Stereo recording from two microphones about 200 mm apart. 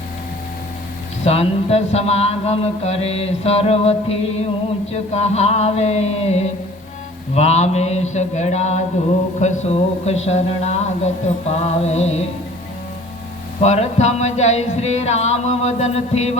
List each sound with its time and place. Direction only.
1.2 s mantra: 30° left (ahead or behind)
13.6 s mantra: 35° left (ahead or behind)